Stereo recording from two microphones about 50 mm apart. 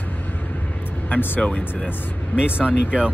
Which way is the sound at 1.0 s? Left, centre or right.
Left.